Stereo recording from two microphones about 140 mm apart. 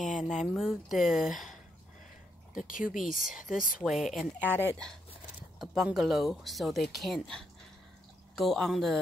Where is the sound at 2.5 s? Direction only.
75° left (ahead or behind).